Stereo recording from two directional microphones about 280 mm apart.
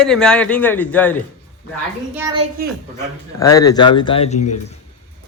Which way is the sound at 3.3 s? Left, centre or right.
Centre.